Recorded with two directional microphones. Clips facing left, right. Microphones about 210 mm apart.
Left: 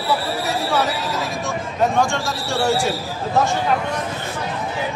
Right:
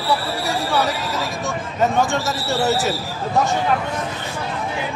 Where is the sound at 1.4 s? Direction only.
Centre (ahead or behind).